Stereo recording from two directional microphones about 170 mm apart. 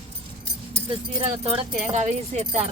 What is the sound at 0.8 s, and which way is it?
Speech, 35° right (ahead or behind).